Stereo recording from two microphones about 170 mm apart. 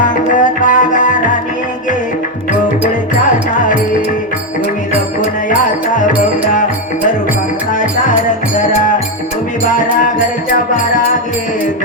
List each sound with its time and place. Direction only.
0.0 s music: 50° left (ahead or behind)